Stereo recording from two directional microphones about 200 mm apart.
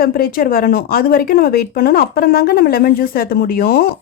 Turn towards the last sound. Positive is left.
turn(degrees=50)  # may be behind; listen again after turning